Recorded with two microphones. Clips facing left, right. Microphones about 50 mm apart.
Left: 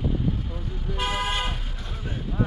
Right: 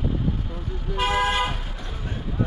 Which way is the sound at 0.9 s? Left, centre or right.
Centre.